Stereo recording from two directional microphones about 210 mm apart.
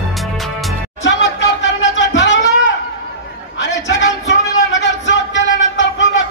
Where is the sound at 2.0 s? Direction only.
60° left (ahead or behind).